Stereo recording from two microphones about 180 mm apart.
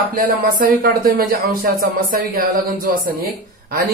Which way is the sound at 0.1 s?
50° right (ahead or behind).